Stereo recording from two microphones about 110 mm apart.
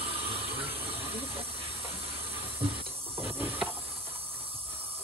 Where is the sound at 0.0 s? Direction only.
60° right (ahead or behind).